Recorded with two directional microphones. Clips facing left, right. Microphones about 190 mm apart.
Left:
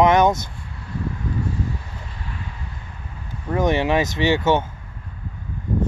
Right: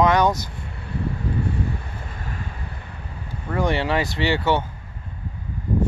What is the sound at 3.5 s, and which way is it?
Speech, 20° left (ahead or behind).